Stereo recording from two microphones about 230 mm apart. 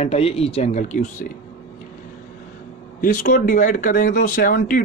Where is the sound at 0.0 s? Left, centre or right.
Left.